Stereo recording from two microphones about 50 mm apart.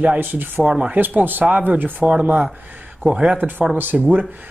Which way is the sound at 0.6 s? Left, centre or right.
Centre.